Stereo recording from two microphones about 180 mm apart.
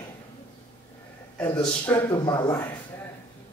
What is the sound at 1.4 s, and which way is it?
Speech, 10° left (ahead or behind).